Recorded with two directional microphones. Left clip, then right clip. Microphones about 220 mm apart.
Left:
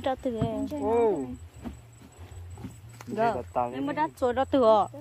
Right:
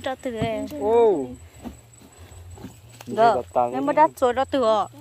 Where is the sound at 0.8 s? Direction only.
30° right (ahead or behind).